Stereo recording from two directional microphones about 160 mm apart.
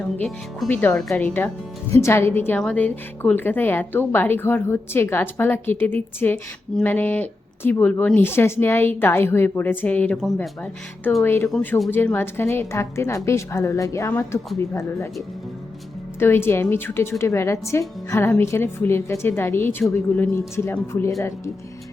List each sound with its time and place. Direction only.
0.2 s speech: centre (ahead or behind)
0.7 s a woman's voice: 10° left (ahead or behind)
16.1 s a woman's voice: 15° left (ahead or behind)